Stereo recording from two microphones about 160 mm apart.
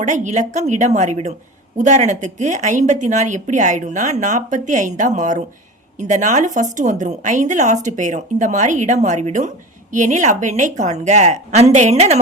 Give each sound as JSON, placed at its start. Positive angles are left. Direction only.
{"t": 0.0, "sound": "a woman's voice", "side_deg": -50}